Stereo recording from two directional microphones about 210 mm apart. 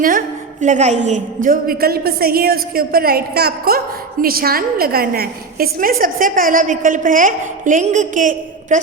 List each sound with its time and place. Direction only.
0.0 s a woman's voice: 40° right (ahead or behind)